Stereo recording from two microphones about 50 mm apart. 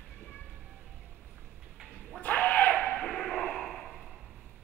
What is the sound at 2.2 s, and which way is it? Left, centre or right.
Whip, left.